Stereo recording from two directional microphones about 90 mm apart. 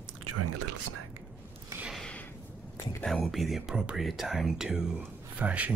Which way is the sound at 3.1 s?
Centre (ahead or behind).